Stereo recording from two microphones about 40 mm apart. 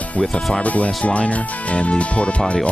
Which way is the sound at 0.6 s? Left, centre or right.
Left.